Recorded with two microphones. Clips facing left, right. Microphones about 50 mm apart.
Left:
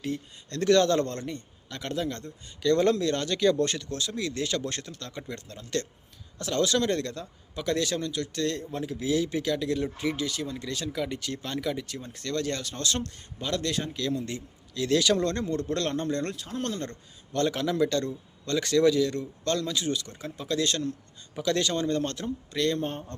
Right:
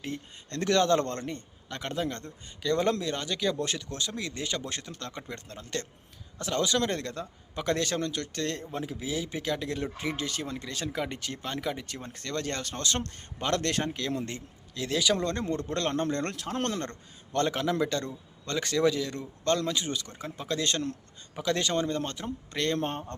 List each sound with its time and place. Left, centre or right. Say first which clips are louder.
0.0 s a man's voice: left 4 dB; right
2.6 s speech: left 4 dB; centre
3.8 s a man's voice: left 3 dB; right; by 4.9 s centre
4.9 s a man's voice: left 1 dB; right
8.6 s speech: left 4 dB; centre
9.4 s a man's voice: left 4 dB; right
11.9 s a man's voice: left 3 dB; right
13.4 s speech: right 1 dB; right
14.3 s speech: left 3 dB; right
14.8 s a man's voice: left 3 dB; centre
16.3 s speech: right 2 dB; right
16.8 s a man's voice: left 1 dB; right; by 22.3 s centre
22.5 s a man's voice: left 1 dB; right